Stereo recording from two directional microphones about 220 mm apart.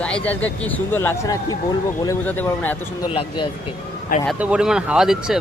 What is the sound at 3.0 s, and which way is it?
Speech, 20° left (ahead or behind).